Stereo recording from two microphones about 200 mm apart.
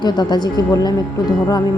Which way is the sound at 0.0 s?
20° left (ahead or behind).